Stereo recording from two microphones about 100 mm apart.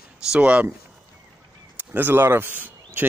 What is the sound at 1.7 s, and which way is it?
Speech, 20° right (ahead or behind).